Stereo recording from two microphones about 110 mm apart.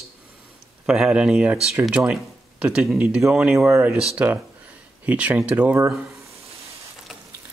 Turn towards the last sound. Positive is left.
turn(degrees=-15)  # may be behind; listen again after turning